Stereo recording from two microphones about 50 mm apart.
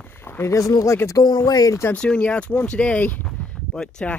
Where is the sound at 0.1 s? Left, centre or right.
Left.